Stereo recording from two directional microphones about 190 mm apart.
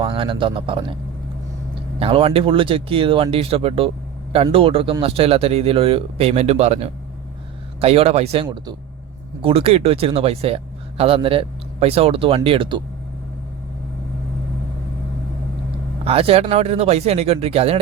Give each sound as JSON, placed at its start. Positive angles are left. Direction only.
{"t": 0.0, "sound": "speech", "side_deg": -25}
{"t": 2.0, "sound": "speech", "side_deg": -30}
{"t": 16.0, "sound": "speech", "side_deg": -30}